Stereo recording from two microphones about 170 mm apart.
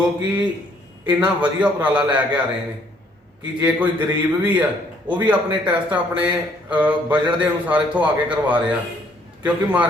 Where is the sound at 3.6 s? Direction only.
25° right (ahead or behind).